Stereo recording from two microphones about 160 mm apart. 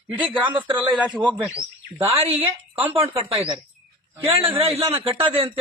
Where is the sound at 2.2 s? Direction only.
35° right (ahead or behind).